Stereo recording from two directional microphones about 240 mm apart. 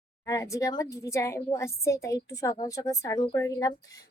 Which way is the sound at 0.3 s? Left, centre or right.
Centre.